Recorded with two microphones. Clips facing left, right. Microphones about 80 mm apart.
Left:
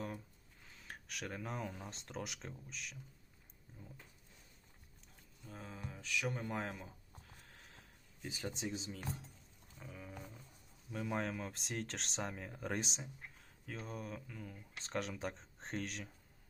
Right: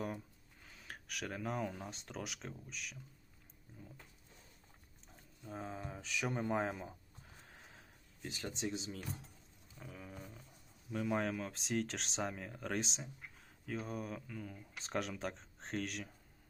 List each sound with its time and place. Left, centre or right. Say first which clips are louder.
0.6 s a sound: right 1 dB; centre
1.9 s speech: even; centre
5.5 s speech: right 5 dB; right
8.2 s speech: right 1 dB; centre